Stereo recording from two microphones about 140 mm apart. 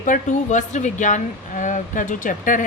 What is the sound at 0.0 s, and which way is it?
A woman's voice, 65° left (ahead or behind).